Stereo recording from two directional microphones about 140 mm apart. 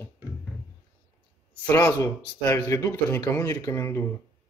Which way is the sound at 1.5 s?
15° left (ahead or behind).